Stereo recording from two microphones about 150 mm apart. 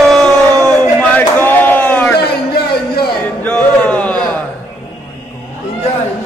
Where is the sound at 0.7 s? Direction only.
10° left (ahead or behind).